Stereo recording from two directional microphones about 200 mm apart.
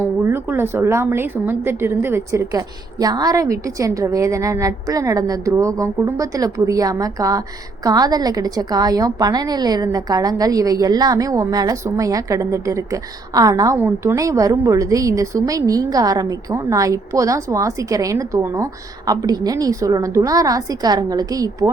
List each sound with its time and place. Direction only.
0.3 s a woman's voice: 10° right (ahead or behind)